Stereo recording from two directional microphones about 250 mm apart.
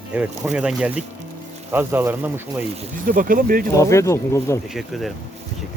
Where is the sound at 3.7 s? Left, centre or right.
Centre.